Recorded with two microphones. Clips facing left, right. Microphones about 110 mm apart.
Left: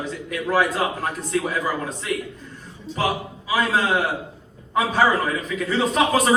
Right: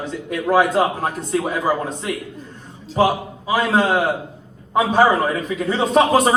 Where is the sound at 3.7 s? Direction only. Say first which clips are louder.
Right 5 dB; 40° right (ahead or behind).